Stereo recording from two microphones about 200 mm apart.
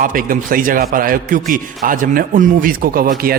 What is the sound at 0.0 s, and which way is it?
A man's voice, 45° right (ahead or behind).